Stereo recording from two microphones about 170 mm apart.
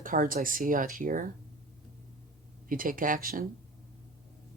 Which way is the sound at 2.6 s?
55° right (ahead or behind).